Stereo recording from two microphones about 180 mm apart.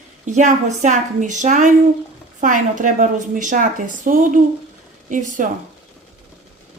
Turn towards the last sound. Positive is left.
turn(degrees=-45)  # may be behind; listen again after turning